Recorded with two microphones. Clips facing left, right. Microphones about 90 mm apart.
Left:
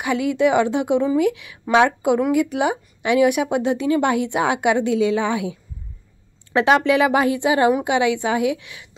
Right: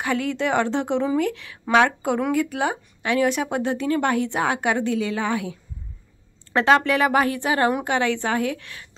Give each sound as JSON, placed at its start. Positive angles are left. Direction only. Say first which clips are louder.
{"t": 0.0, "sound": "speech", "louder": "left 5 dB", "side_deg": 15}
{"t": 6.5, "sound": "speech", "louder": "left 2 dB", "side_deg": 15}